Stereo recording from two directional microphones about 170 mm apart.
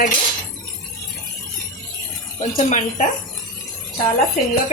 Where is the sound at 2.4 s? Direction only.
45° left (ahead or behind).